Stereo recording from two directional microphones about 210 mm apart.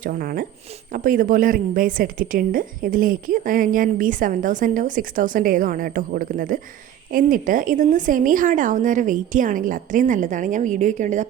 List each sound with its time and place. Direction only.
0.0 s a woman's voice: 40° right (ahead or behind)